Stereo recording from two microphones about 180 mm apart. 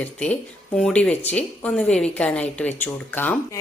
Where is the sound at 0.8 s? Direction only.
5° left (ahead or behind).